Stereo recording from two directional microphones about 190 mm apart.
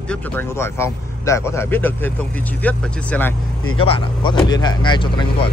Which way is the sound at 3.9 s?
25° left (ahead or behind).